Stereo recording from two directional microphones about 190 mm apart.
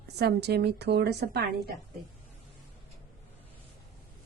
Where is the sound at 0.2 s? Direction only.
60° right (ahead or behind).